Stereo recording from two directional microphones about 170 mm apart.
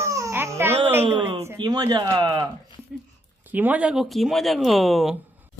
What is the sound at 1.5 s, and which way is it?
Speech, 25° right (ahead or behind).